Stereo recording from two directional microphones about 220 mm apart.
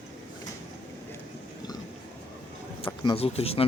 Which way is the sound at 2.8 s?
25° left (ahead or behind).